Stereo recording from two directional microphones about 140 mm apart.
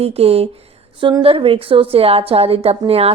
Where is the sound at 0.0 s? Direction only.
45° right (ahead or behind).